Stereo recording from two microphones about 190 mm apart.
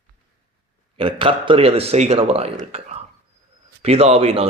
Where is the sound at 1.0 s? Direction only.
30° right (ahead or behind).